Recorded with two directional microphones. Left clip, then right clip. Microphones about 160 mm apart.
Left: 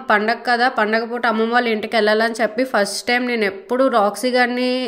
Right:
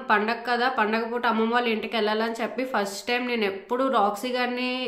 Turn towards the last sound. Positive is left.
turn(degrees=45)  # may be behind; listen again after turning